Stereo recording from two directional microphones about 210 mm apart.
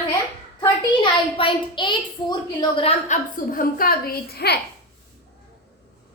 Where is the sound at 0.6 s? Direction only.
25° left (ahead or behind).